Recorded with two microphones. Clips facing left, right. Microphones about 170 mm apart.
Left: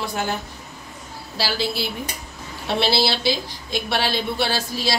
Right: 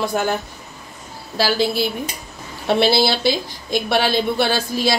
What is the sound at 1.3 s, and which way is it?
A woman's voice, 50° right (ahead or behind).